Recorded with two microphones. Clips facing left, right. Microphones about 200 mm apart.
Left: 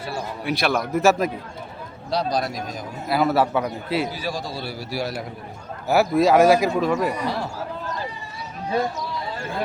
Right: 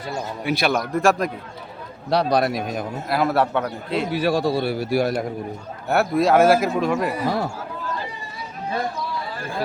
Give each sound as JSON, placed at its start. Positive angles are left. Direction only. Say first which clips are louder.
{"t": 0.4, "sound": "a man's voice", "louder": "right 1 dB", "side_deg": 0}
{"t": 2.0, "sound": "speech", "louder": "right 5 dB", "side_deg": -65}
{"t": 3.1, "sound": "a man's voice", "louder": "left 1 dB", "side_deg": 0}
{"t": 4.1, "sound": "speech", "louder": "right 9 dB", "side_deg": -65}
{"t": 5.9, "sound": "a man's voice", "louder": "left 1 dB", "side_deg": 0}
{"t": 7.3, "sound": "speech", "louder": "right 4 dB", "side_deg": -45}